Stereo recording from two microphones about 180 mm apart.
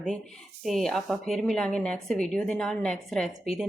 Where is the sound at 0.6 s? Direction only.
Centre (ahead or behind).